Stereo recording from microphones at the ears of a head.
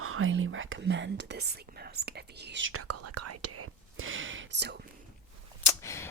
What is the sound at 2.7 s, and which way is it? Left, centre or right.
Speech, right.